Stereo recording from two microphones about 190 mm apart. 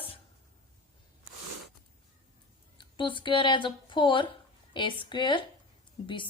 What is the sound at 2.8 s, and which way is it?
A woman's voice, 25° left (ahead or behind).